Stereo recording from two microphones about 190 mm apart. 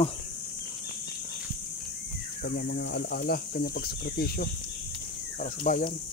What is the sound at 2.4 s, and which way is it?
Speech, 60° left (ahead or behind).